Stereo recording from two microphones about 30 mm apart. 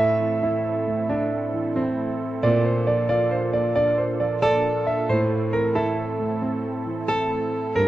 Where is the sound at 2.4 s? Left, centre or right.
Centre.